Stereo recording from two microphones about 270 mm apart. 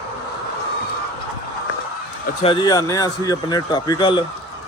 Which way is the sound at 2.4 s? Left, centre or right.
Centre.